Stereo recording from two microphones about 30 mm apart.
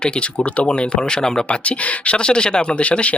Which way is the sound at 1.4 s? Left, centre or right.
Left.